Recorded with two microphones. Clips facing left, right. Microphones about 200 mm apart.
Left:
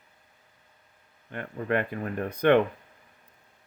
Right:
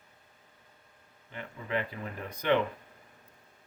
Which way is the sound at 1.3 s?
55° left (ahead or behind).